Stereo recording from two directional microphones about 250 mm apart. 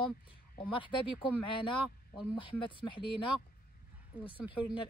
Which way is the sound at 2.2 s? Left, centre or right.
Centre.